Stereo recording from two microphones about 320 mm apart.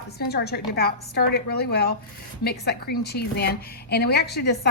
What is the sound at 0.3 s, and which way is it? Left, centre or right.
A woman's voice, left.